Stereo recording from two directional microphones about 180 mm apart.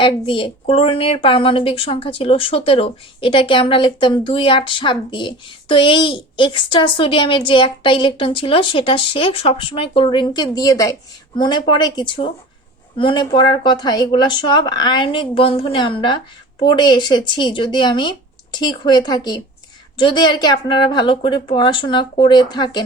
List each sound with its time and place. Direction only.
0.0 s a woman's voice: 25° left (ahead or behind)